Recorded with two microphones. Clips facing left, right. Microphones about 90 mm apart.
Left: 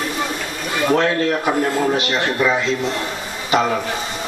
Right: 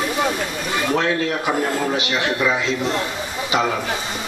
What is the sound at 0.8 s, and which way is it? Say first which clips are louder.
A man's voice: left 4 dB; 45° left (ahead or behind).